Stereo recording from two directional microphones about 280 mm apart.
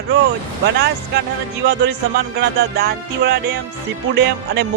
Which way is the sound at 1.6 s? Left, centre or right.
Right.